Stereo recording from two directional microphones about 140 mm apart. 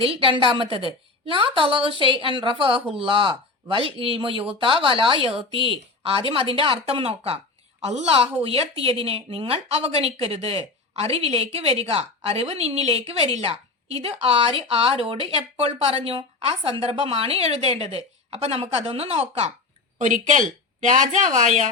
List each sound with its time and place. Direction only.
0.0 s a woman's voice: 40° right (ahead or behind)
20.0 s speech: 60° right (ahead or behind)